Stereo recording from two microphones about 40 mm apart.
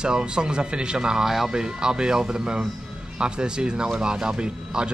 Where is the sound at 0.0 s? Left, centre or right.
Right.